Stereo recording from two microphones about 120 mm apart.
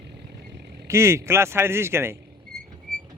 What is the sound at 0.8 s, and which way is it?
Speech, 25° right (ahead or behind).